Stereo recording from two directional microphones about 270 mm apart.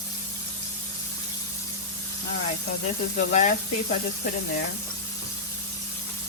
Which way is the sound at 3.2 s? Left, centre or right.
Left.